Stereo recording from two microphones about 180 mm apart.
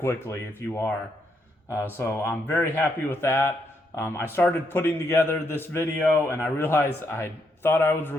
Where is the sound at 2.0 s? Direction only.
15° left (ahead or behind).